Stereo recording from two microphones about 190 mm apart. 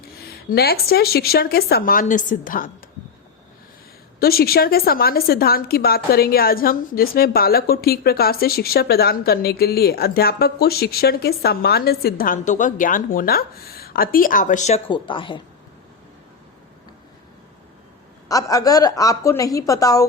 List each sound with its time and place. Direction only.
0.5 s a woman's voice: 55° left (ahead or behind)
4.2 s a woman's voice: 55° left (ahead or behind)
14.8 s a woman's voice: 25° left (ahead or behind)
18.3 s a woman's voice: 20° left (ahead or behind)